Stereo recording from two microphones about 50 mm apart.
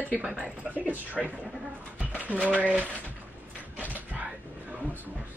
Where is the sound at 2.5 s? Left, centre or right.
Right.